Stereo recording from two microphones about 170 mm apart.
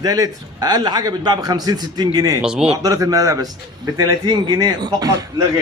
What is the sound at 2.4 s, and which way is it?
Speech, 5° right (ahead or behind).